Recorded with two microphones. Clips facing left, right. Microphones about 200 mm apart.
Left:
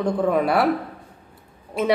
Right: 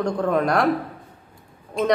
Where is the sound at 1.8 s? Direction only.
5° left (ahead or behind).